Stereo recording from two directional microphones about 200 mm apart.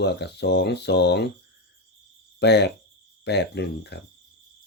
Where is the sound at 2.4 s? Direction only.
55° left (ahead or behind).